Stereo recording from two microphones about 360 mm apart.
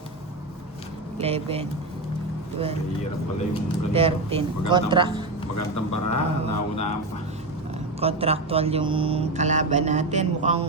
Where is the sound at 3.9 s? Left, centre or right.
Centre.